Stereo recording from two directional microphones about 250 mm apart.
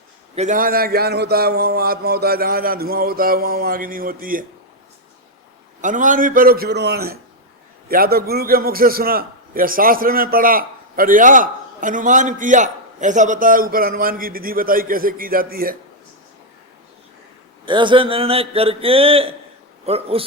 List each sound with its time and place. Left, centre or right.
0.3 s a man's voice: right
5.8 s a man's voice: right
17.7 s a man's voice: centre